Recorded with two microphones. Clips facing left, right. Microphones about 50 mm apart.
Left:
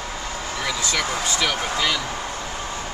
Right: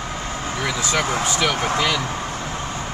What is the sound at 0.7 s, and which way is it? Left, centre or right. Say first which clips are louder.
Speech: right 3 dB; right.